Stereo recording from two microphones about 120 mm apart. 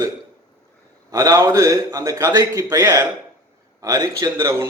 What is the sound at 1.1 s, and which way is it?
A man's voice, 25° right (ahead or behind).